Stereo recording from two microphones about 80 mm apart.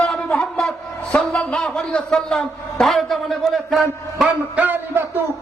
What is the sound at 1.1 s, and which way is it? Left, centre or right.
A man's voice, centre.